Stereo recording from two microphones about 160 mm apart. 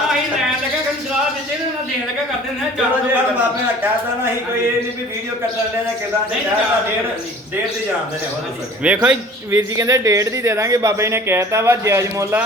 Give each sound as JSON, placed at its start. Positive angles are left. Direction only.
{"t": 8.8, "sound": "speech", "side_deg": -5}
{"t": 9.5, "sound": "speech", "side_deg": -20}